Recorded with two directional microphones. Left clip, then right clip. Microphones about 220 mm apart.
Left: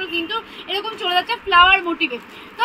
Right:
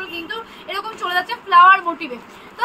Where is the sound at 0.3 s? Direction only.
20° right (ahead or behind).